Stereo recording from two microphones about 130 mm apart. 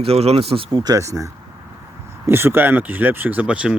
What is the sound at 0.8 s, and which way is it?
Speech, 25° right (ahead or behind).